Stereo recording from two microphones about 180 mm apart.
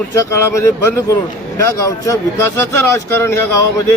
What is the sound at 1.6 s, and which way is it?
Speech, 15° left (ahead or behind).